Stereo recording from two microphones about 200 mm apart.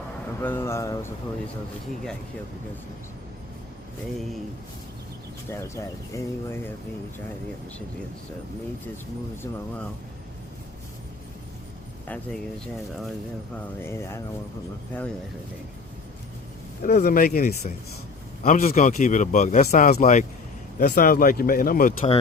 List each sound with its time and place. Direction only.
0.4 s speech: 10° left (ahead or behind)
5.5 s speech: 15° left (ahead or behind)
12.0 s speech: 5° left (ahead or behind)
13.8 s speech: 10° left (ahead or behind)
16.8 s a man's voice: 50° left (ahead or behind)